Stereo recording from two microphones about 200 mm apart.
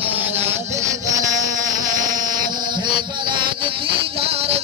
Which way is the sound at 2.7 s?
25° right (ahead or behind).